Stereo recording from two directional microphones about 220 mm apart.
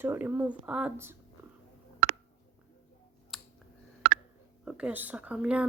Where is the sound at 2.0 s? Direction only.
50° right (ahead or behind).